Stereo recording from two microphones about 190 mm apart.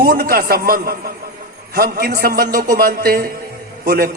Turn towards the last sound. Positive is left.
turn(degrees=-55)  # may be behind; listen again after turning